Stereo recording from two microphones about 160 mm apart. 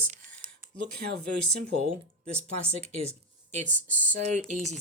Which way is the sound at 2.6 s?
40° right (ahead or behind).